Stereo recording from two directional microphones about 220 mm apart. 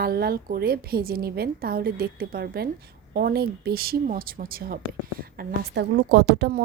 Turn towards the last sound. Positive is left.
turn(degrees=-50)  # may be behind; listen again after turning